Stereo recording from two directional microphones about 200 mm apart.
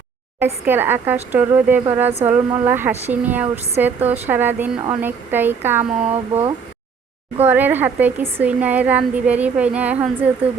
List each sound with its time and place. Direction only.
0.3 s a woman's voice: 10° right (ahead or behind)
6.1 s speech: 30° right (ahead or behind)
7.4 s a woman's voice: 10° right (ahead or behind)